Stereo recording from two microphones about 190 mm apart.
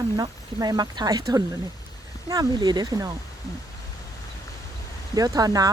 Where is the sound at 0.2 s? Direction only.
20° right (ahead or behind).